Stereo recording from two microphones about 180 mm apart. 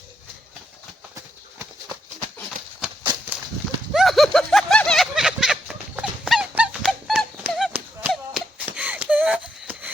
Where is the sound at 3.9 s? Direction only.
Centre (ahead or behind).